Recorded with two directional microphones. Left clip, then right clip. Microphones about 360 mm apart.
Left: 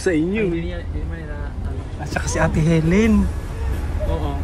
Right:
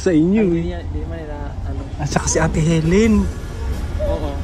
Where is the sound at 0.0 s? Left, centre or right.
Centre.